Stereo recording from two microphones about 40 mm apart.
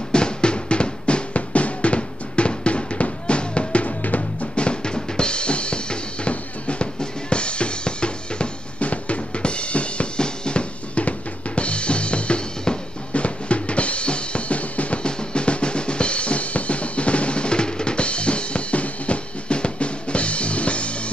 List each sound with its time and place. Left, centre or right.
0.1 s drum: left
4.0 s music: left
4.6 s drum: left
15.0 s drum: left